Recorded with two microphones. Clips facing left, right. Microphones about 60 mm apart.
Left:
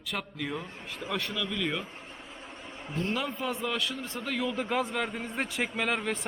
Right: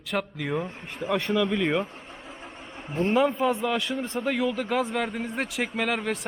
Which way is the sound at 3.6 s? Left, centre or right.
Centre.